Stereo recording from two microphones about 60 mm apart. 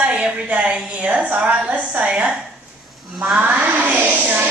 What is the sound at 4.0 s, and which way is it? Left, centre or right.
Speech, right.